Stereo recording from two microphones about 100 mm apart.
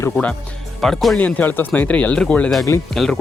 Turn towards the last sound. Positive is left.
turn(degrees=5)  # may be behind; listen again after turning